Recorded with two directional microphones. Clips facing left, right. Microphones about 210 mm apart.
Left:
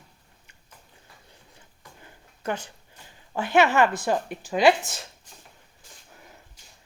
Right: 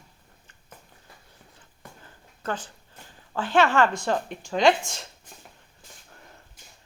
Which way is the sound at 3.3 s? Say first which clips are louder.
Left 1 dB; 10° left (ahead or behind).